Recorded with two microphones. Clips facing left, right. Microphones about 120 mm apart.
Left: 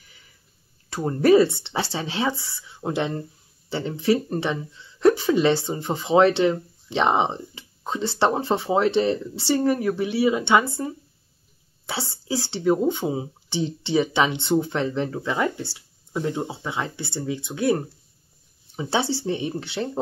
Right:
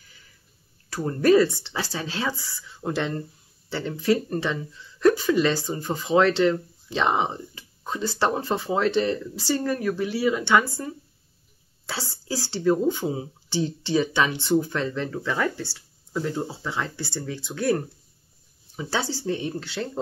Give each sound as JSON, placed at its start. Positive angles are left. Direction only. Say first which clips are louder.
{"t": 0.8, "sound": "a woman's voice", "louder": "left 2 dB", "side_deg": 25}